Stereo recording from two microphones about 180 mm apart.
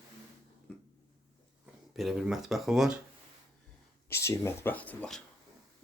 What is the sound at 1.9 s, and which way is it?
Speech, centre (ahead or behind).